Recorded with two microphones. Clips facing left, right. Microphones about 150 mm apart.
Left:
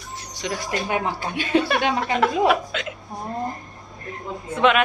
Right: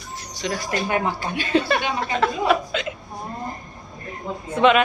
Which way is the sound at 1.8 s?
90° left.